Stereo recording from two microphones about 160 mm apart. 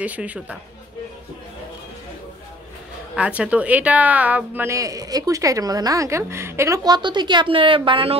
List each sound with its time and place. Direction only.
0.0 s speech: 10° right (ahead or behind)
3.2 s a woman's voice: 10° right (ahead or behind); by 8.2 s 35° right (ahead or behind)